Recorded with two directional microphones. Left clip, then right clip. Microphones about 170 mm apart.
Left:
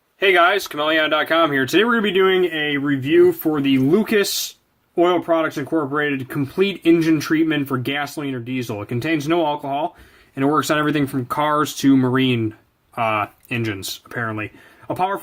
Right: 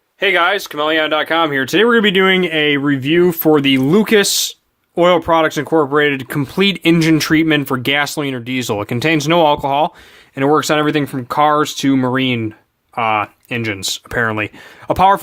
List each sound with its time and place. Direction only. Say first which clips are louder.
0.2 s speech: right 1 dB; 40° right (ahead or behind)
10.3 s speech: right 5 dB; 35° right (ahead or behind)
13.9 s speech: right 8 dB; 50° right (ahead or behind)